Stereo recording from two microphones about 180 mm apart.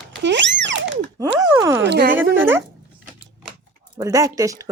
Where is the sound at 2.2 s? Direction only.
10° right (ahead or behind).